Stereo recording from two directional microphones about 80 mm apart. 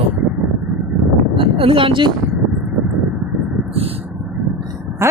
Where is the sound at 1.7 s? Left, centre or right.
Right.